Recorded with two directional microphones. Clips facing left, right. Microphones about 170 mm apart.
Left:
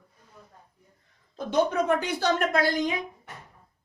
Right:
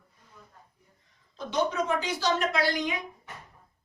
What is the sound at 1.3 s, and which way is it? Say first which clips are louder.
Speech: left 4 dB; 55° left (ahead or behind).